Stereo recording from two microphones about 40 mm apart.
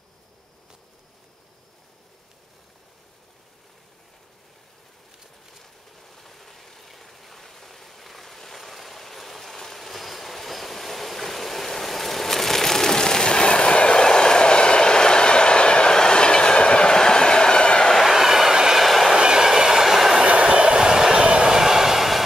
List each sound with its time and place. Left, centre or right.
5.6 s a sound: centre; by 17.8 s left
18.0 s train: centre
18.8 s train: centre
19.1 s train: centre
20.2 s train: right
21.5 s train: centre